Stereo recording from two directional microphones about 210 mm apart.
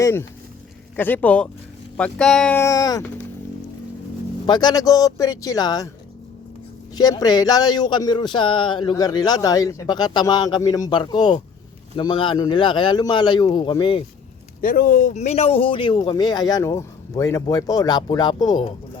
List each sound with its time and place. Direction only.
0.0 s a man's voice: 10° left (ahead or behind)
4.4 s a man's voice: 20° left (ahead or behind)
6.9 s speech: 15° left (ahead or behind)
14.6 s speech: 45° left (ahead or behind); by 18.6 s 20° left (ahead or behind)